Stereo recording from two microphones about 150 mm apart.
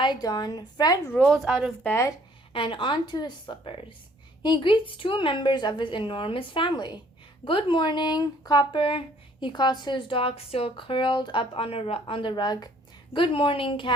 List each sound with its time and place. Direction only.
0.0 s a woman's voice: 30° left (ahead or behind)
1.1 s speech: centre (ahead or behind)
1.8 s speech: 15° left (ahead or behind)
2.5 s speech: 35° left (ahead or behind)